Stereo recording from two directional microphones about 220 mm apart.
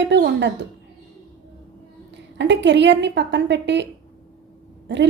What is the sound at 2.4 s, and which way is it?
A woman's voice, 55° right (ahead or behind).